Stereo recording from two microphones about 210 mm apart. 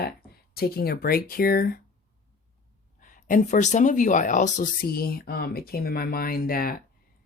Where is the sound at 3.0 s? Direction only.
40° left (ahead or behind).